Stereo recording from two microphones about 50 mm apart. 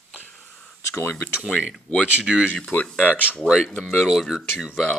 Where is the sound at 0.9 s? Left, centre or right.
Left.